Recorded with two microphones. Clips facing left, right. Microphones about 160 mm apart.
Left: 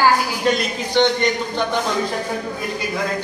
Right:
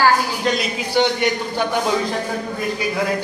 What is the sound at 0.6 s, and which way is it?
Speech, 10° right (ahead or behind).